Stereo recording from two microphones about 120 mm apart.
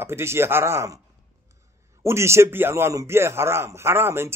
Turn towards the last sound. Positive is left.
turn(degrees=-20)  # may be behind; listen again after turning